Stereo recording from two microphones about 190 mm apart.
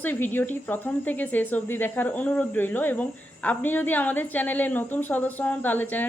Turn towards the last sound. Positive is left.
turn(degrees=10)  # may be behind; listen again after turning